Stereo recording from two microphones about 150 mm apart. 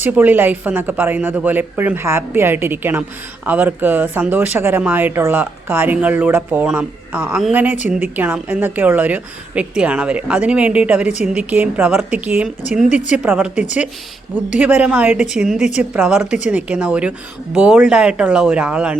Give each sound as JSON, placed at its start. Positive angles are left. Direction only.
{"t": 0.0, "sound": "speech", "side_deg": -10}